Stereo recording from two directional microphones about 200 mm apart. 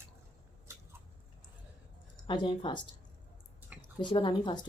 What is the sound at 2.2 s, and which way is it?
Speech, 25° left (ahead or behind).